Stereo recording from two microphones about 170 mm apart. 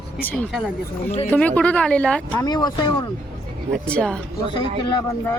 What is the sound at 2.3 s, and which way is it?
Speech, 25° left (ahead or behind).